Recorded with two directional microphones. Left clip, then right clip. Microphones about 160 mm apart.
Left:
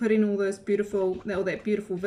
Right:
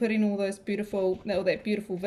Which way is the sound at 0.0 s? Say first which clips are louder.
Left 3 dB; 20° right (ahead or behind).